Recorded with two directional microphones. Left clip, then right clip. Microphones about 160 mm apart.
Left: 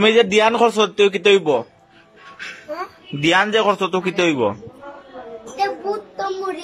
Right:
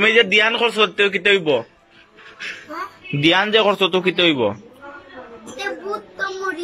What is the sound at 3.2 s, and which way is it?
A man's voice, 5° left (ahead or behind).